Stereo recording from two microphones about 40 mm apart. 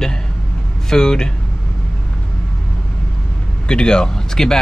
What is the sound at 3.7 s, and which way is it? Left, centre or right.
Speech, left.